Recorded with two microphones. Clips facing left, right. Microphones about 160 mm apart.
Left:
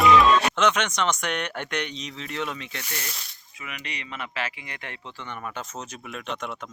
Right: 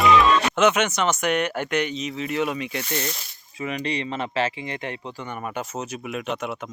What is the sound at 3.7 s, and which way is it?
Speech, 30° right (ahead or behind).